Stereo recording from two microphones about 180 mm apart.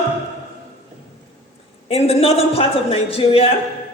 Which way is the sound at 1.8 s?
35° left (ahead or behind).